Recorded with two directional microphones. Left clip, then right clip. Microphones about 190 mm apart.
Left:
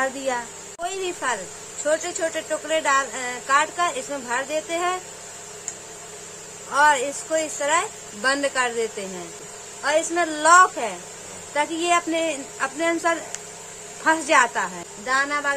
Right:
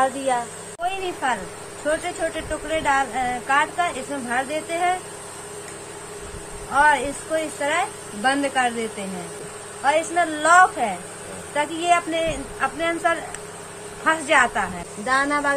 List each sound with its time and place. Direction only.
1.9 s speech: 50° left (ahead or behind)
6.7 s speech: 45° left (ahead or behind)
9.8 s a woman's voice: 35° left (ahead or behind)
15.0 s speech: 10° right (ahead or behind)